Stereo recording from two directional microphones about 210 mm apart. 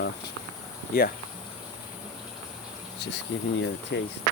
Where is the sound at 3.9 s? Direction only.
55° left (ahead or behind).